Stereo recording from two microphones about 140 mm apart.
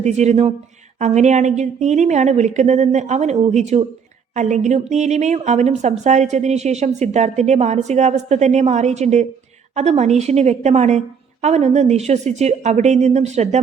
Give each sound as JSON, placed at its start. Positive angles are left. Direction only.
{"t": 0.0, "sound": "a woman's voice", "side_deg": -55}